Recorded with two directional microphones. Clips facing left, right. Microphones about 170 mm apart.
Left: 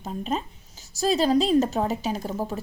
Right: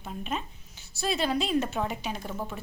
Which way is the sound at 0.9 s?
35° left (ahead or behind).